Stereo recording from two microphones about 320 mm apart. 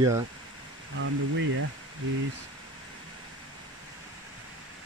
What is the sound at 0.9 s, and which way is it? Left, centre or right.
Speech, right.